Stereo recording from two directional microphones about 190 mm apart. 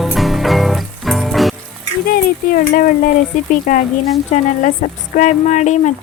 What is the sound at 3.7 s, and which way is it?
Speech, 45° left (ahead or behind).